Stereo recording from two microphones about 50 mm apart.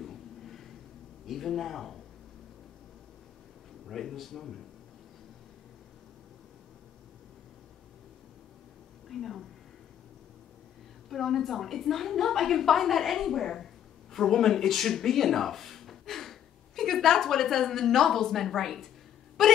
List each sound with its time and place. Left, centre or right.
0.0 s a sound: centre
1.2 s a woman's voice: centre
3.8 s a woman's voice: centre
9.1 s a woman's voice: centre
11.1 s a woman's voice: centre